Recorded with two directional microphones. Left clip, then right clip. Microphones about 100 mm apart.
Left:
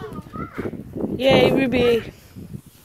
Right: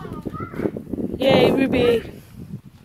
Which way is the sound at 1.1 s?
30° right (ahead or behind).